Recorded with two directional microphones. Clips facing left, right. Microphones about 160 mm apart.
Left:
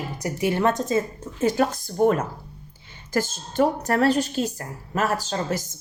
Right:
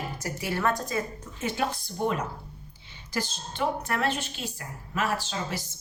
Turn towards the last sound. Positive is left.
turn(degrees=40)  # may be behind; listen again after turning